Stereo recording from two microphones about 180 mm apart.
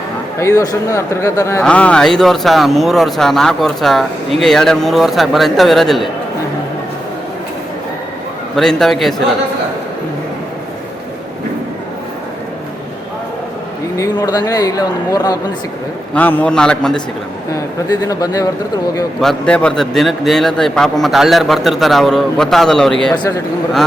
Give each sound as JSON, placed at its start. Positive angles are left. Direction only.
{"t": 0.3, "sound": "a man's voice", "side_deg": 20}
{"t": 8.5, "sound": "speech", "side_deg": 0}
{"t": 13.9, "sound": "speech", "side_deg": 20}
{"t": 16.1, "sound": "speech", "side_deg": 10}
{"t": 17.5, "sound": "speech", "side_deg": 20}
{"t": 19.2, "sound": "speech", "side_deg": 5}